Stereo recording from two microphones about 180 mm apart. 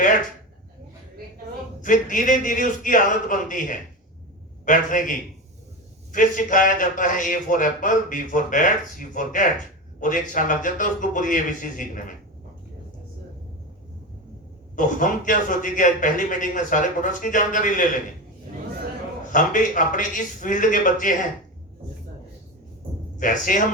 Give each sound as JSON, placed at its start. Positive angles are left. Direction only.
{"t": 1.8, "sound": "a man's voice", "side_deg": 45}
{"t": 14.8, "sound": "a man's voice", "side_deg": 45}
{"t": 19.3, "sound": "a man's voice", "side_deg": 45}
{"t": 23.1, "sound": "a man's voice", "side_deg": 45}